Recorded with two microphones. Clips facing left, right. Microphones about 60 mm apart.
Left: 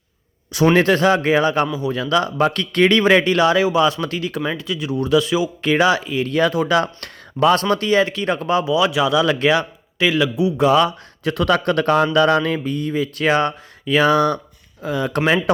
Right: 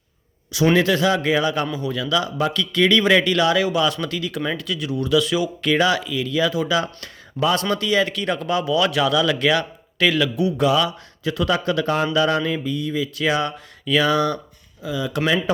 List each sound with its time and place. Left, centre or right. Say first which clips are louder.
0.5 s speech: left 3 dB; left
1.6 s speech: left 3 dB; centre
1.9 s speech: left 3 dB; left
4.5 s speech: left 2 dB; left
6.3 s speech: left 4 dB; left
7.6 s speech: left 3 dB; left
8.6 s speech: left 2 dB; centre
9.1 s speech: left 3 dB; left
10.7 s speech: left 4 dB; left
12.5 s speech: left 2 dB; left